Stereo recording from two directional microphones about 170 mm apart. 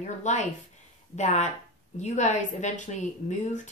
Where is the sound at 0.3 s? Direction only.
45° left (ahead or behind).